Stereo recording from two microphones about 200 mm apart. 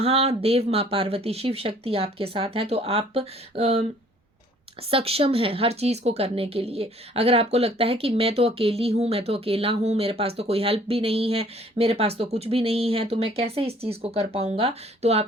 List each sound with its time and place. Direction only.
0.0 s speech: 30° right (ahead or behind)
4.9 s speech: 30° right (ahead or behind)